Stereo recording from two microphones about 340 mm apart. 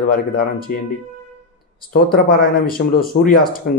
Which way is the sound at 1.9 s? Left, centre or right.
Left.